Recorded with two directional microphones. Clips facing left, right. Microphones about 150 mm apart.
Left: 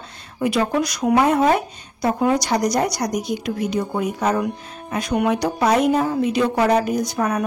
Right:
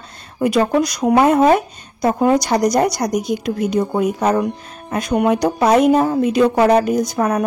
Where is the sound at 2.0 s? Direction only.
45° right (ahead or behind).